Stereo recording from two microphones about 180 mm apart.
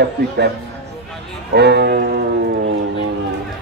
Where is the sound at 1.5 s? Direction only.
65° right (ahead or behind).